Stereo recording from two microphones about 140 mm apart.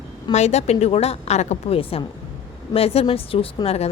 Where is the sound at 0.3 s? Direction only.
55° left (ahead or behind).